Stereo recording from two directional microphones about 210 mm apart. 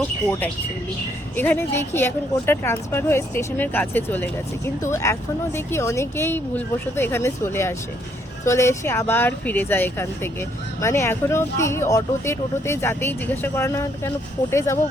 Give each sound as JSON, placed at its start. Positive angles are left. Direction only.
{"t": 0.3, "sound": "a woman's voice", "side_deg": 10}